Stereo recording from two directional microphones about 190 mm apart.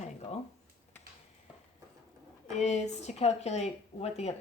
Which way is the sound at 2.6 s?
35° left (ahead or behind).